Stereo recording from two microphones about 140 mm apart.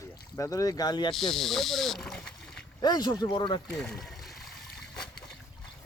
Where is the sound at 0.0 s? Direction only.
20° left (ahead or behind).